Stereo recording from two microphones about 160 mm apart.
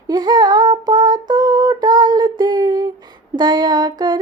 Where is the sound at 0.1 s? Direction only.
30° right (ahead or behind).